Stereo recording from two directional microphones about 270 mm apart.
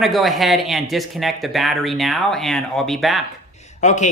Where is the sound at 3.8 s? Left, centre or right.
Left.